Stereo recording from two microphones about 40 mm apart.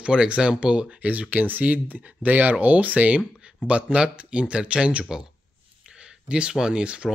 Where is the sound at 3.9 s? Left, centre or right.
Right.